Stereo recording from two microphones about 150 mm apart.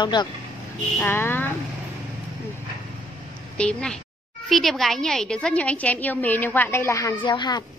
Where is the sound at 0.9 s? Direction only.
15° left (ahead or behind).